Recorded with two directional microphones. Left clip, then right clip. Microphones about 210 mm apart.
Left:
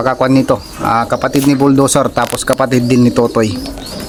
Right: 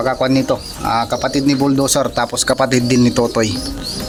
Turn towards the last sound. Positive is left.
turn(degrees=30)  # may be behind; listen again after turning